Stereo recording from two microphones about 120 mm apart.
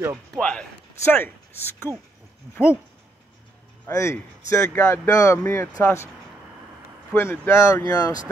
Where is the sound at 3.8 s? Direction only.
25° left (ahead or behind).